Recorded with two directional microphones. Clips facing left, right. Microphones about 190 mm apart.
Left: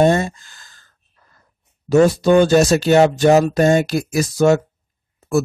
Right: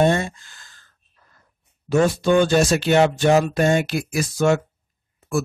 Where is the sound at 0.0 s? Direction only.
40° left (ahead or behind).